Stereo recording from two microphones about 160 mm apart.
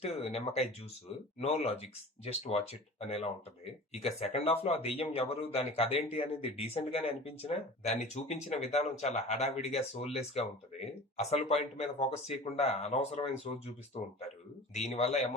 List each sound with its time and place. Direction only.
0.0 s speech: 40° left (ahead or behind)